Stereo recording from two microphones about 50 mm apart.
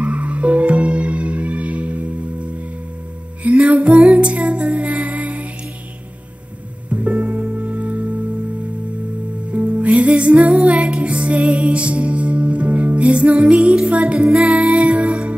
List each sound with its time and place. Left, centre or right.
0.0 s music: right
6.9 s music: right
9.5 s music: right